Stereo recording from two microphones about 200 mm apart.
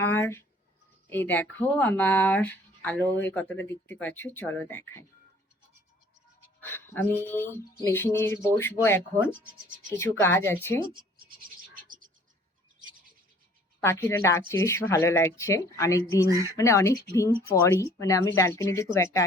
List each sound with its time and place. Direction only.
0.0 s a sound: 10° left (ahead or behind)
1.1 s speech: 10° left (ahead or behind)
6.6 s speech: 10° left (ahead or behind)
9.1 s speech: 5° right (ahead or behind)
10.0 s speech: 10° left (ahead or behind)
11.3 s a sound: 45° right (ahead or behind)
13.8 s speech: 10° left (ahead or behind)